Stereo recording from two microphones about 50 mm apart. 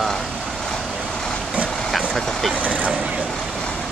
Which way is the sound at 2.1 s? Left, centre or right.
Centre.